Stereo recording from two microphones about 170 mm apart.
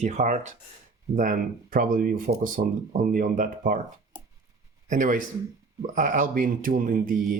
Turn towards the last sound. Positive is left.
turn(degrees=-50)  # may be behind; listen again after turning